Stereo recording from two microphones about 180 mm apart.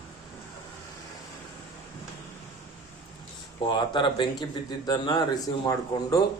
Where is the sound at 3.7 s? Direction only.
25° left (ahead or behind).